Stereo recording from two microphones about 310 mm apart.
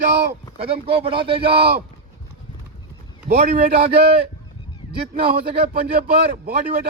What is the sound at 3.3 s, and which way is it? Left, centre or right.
Speech, right.